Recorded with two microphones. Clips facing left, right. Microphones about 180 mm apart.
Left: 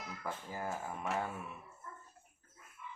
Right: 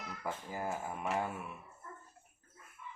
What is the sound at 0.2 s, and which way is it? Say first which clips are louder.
Speech: right 2 dB; 10° right (ahead or behind).